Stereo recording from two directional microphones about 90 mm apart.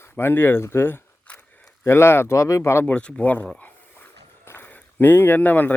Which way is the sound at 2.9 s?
15° left (ahead or behind).